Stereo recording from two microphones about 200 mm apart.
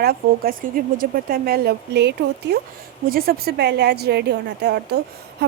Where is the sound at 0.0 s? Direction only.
50° right (ahead or behind).